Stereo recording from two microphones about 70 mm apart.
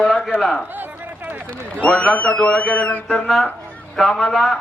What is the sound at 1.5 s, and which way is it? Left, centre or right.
A man's voice, centre.